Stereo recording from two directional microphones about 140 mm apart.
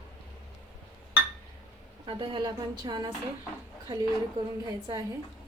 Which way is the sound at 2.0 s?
35° right (ahead or behind).